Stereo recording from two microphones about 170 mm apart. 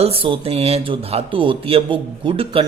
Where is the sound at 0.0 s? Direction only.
35° right (ahead or behind).